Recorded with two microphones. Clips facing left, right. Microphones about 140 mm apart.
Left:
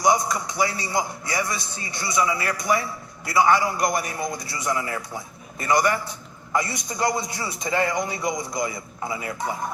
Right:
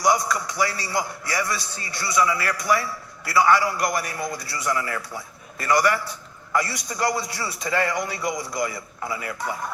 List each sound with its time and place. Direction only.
0.0 s a man's voice: 20° left (ahead or behind)